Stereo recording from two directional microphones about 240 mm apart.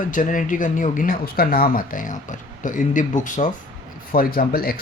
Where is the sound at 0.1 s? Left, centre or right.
Left.